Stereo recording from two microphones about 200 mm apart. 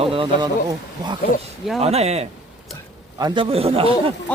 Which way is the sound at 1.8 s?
30° right (ahead or behind).